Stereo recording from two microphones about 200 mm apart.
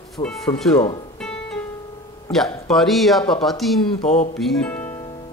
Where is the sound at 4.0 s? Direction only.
35° left (ahead or behind).